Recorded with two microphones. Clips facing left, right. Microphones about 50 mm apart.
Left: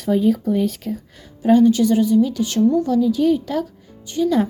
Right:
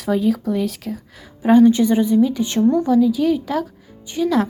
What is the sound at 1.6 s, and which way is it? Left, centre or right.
A woman's voice, right.